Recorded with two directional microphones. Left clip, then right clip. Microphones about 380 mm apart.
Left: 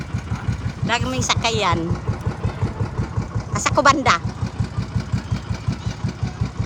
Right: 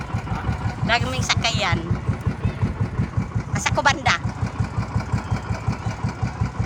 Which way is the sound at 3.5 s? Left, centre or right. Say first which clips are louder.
Left 4 dB; centre.